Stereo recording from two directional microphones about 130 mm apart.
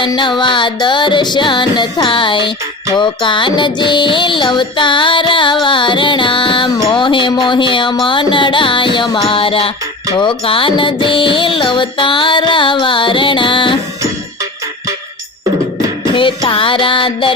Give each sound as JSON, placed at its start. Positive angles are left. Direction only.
{"t": 0.0, "sound": "music", "side_deg": 35}
{"t": 16.1, "sound": "music", "side_deg": 40}